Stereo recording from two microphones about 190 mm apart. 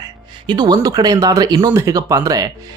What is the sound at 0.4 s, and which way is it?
Speech, 20° right (ahead or behind).